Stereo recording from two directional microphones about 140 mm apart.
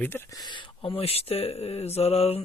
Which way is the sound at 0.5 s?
35° left (ahead or behind).